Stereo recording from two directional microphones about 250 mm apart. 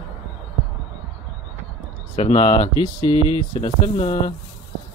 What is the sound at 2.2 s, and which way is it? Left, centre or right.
Speech, left.